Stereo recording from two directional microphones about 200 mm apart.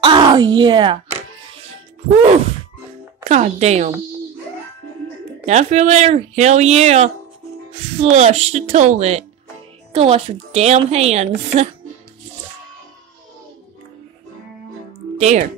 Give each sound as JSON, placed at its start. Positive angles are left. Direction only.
{"t": 0.0, "sound": "speech", "side_deg": -25}
{"t": 3.3, "sound": "speech", "side_deg": -35}
{"t": 5.4, "sound": "speech", "side_deg": -35}
{"t": 15.1, "sound": "speech", "side_deg": -35}